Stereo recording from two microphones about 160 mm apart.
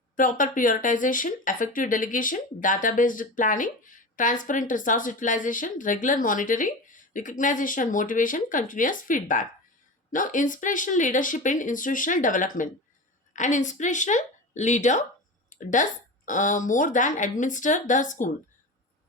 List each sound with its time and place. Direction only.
0.2 s speech: 55° left (ahead or behind)